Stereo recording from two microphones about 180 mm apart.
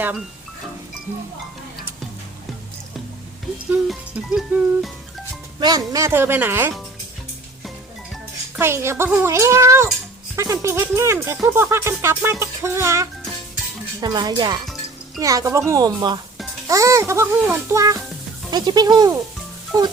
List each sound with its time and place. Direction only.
3.8 s music: 5° right (ahead or behind)
5.5 s speech: 20° right (ahead or behind)
8.5 s a woman's voice: 15° right (ahead or behind)